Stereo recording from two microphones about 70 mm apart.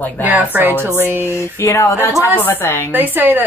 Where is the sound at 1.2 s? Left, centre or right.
Left.